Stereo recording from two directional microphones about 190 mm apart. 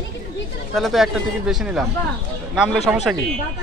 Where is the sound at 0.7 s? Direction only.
Centre (ahead or behind).